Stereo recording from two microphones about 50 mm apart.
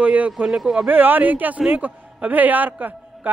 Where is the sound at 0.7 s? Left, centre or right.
Right.